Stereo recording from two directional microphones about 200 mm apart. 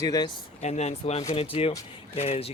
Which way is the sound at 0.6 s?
35° left (ahead or behind).